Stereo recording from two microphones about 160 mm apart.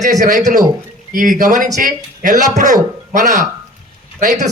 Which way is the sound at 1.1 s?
55° right (ahead or behind).